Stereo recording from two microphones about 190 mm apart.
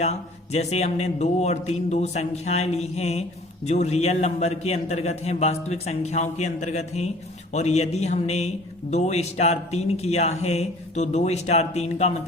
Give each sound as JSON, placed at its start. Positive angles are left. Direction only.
{"t": 0.5, "sound": "a man's voice", "side_deg": 35}